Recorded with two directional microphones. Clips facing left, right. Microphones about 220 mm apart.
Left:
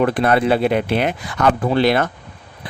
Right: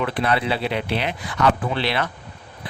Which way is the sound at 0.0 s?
45° left (ahead or behind).